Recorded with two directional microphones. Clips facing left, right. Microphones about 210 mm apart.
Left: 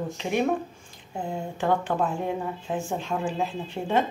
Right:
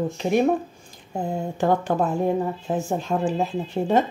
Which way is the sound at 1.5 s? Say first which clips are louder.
Right 3 dB; 40° right (ahead or behind).